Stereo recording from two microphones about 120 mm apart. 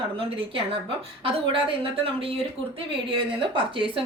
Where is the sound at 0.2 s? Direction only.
50° right (ahead or behind).